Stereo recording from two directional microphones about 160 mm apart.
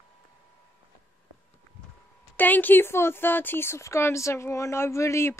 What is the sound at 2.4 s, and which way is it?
Speech, 10° left (ahead or behind).